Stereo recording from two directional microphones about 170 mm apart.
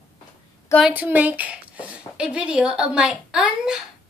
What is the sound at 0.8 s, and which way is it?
Speech, 10° right (ahead or behind).